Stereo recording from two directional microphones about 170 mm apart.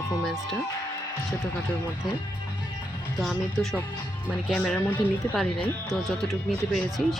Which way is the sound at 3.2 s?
Centre (ahead or behind).